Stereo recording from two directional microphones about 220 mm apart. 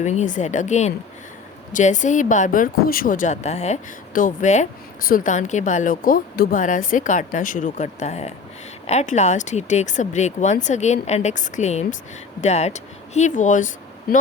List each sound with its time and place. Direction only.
0.0 s speech: 30° left (ahead or behind)